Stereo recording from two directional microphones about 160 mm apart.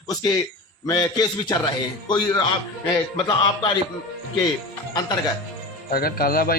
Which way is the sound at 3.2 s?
30° left (ahead or behind).